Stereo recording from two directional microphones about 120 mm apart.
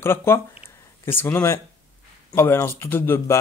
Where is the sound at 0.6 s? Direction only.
20° left (ahead or behind).